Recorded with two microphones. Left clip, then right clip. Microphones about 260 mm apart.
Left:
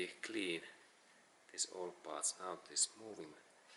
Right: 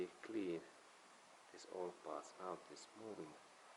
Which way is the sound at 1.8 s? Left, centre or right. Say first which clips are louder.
Left 2 dB; right.